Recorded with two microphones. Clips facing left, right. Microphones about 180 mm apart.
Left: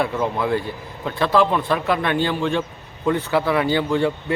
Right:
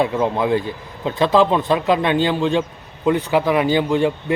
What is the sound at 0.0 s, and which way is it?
A man's voice, 20° right (ahead or behind).